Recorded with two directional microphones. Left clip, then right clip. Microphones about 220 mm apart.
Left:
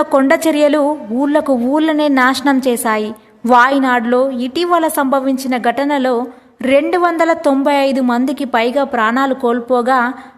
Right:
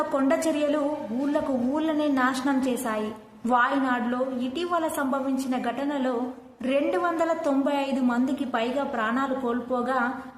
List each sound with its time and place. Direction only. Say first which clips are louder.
0.1 s a woman's voice: left 12 dB; 40° left (ahead or behind)